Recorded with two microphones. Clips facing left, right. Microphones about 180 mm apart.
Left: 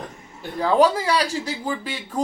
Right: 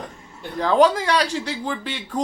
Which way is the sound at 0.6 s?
10° left (ahead or behind).